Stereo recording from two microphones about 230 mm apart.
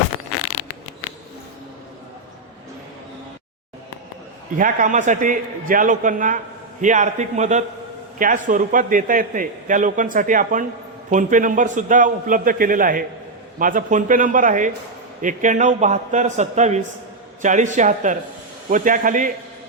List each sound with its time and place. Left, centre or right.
4.5 s a man's voice: right